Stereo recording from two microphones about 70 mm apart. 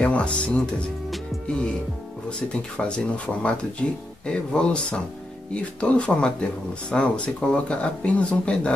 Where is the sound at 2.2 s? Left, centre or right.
Centre.